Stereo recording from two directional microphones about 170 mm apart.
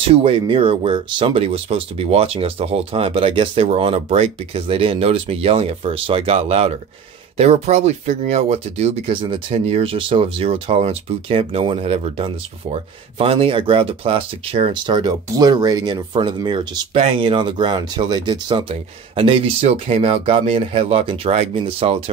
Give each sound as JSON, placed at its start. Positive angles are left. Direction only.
{"t": 0.1, "sound": "speech", "side_deg": -35}